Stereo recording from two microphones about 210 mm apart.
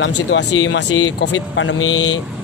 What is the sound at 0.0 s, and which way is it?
Speech, 60° left (ahead or behind).